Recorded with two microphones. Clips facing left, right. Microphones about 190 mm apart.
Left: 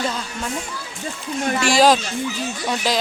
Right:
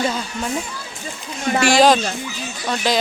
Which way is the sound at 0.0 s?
5° right (ahead or behind).